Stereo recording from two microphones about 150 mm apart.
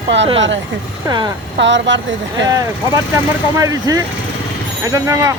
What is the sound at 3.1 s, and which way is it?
Speech, 20° right (ahead or behind).